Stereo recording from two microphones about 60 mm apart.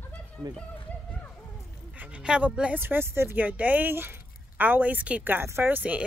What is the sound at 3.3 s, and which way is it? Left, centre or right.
Music, right.